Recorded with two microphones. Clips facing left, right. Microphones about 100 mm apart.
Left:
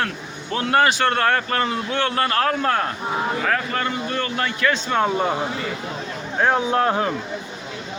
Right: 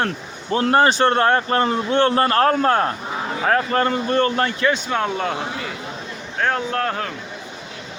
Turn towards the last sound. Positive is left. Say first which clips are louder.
# left 4 dB
turn(degrees=15)  # may be behind; listen again after turning